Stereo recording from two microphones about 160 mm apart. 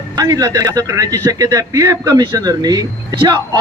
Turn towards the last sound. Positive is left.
turn(degrees=-30)  # may be behind; listen again after turning